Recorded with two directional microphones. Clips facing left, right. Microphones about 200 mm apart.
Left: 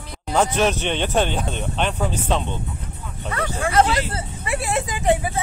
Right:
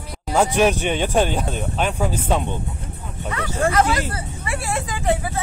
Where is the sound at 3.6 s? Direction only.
45° right (ahead or behind).